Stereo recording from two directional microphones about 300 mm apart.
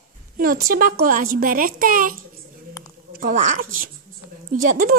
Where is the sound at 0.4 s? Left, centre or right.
Right.